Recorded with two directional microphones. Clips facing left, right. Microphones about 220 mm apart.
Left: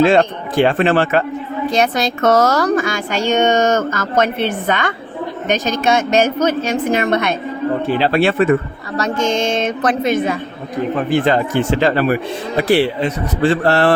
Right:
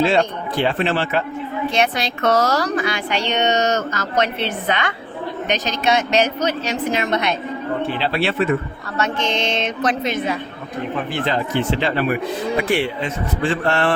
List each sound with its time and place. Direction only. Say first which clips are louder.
0.0 s a woman's voice: left 5 dB; 50° left (ahead or behind)